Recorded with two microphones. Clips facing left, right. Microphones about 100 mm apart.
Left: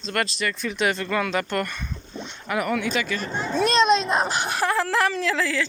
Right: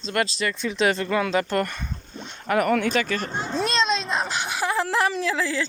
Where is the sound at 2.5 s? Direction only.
45° right (ahead or behind).